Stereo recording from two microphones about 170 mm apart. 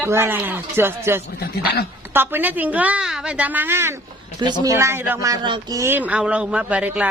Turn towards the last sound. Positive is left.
turn(degrees=-10)  # may be behind; listen again after turning